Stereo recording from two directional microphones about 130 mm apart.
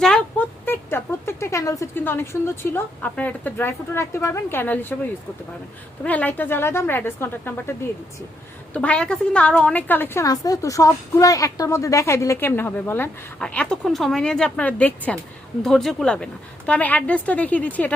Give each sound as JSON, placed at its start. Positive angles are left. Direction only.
{"t": 0.0, "sound": "speech", "side_deg": 5}
{"t": 6.0, "sound": "a woman's voice", "side_deg": 10}
{"t": 10.2, "sound": "a woman's voice", "side_deg": 30}